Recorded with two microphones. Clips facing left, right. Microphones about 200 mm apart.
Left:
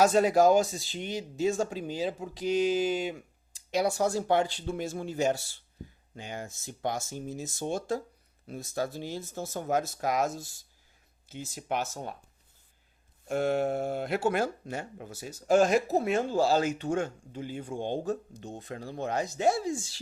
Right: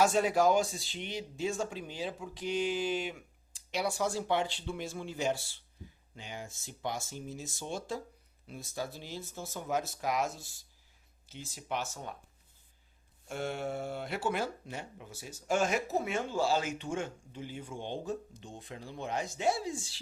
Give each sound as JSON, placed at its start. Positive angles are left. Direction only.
{"t": 0.0, "sound": "speech", "side_deg": 40}
{"t": 13.2, "sound": "speech", "side_deg": 50}
{"t": 15.4, "sound": "speech", "side_deg": 35}